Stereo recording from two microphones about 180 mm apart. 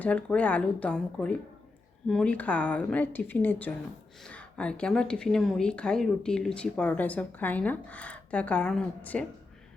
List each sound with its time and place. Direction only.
0.0 s a woman's voice: 5° left (ahead or behind)